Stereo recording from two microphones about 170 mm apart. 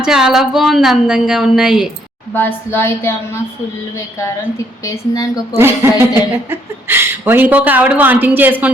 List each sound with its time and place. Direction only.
0.0 s a woman's voice: 5° right (ahead or behind)
2.3 s a woman's voice: 10° left (ahead or behind)
5.5 s a woman's voice: 15° right (ahead or behind)